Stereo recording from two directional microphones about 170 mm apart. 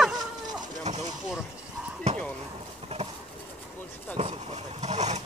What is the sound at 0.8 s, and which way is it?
Speech, 40° right (ahead or behind).